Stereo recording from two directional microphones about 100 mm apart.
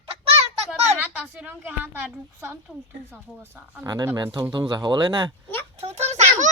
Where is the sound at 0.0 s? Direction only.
80° right.